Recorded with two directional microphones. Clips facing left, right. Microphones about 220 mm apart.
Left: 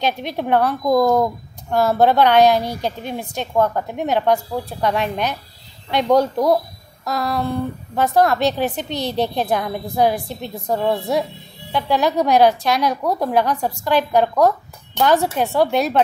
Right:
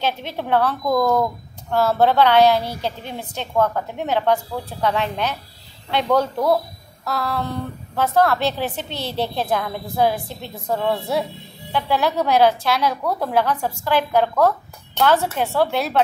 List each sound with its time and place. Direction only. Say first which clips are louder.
0.0 s a woman's voice: left 3 dB; 15° left (ahead or behind)